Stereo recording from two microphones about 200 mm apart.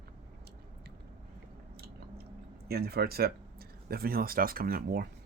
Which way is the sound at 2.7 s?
50° right (ahead or behind).